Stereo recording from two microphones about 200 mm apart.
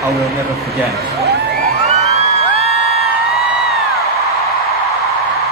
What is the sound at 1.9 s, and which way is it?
Music, 30° right (ahead or behind).